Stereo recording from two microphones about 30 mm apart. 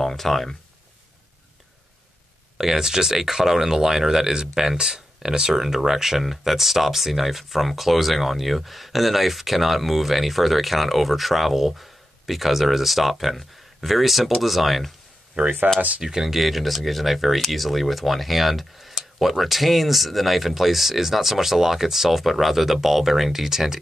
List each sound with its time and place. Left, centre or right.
0.0 s speech: centre
2.5 s speech: centre
5.5 s speech: centre
15.4 s speech: right
16.0 s speech: centre
16.3 s speech: centre